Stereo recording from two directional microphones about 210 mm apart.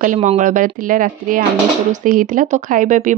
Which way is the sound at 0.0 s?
35° right (ahead or behind).